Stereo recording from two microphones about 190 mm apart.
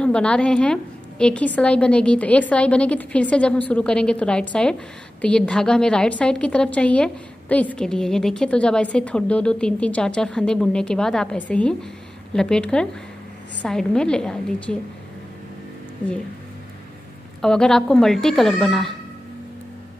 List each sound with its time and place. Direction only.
0.0 s a woman's voice: 5° left (ahead or behind)
17.4 s a woman's voice: 5° left (ahead or behind)